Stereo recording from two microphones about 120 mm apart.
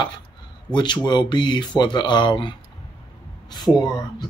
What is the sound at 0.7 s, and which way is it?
Speech, 40° left (ahead or behind).